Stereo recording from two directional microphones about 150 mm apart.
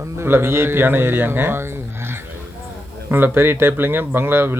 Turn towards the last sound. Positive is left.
turn(degrees=-15)  # may be behind; listen again after turning